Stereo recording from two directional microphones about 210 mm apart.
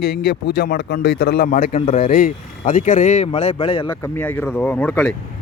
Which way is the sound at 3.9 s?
10° left (ahead or behind).